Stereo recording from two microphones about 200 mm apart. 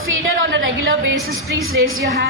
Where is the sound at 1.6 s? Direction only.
90° right.